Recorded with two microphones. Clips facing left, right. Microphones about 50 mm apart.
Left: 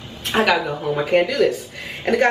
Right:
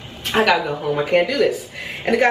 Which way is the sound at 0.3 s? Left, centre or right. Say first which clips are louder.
Right 1 dB; centre.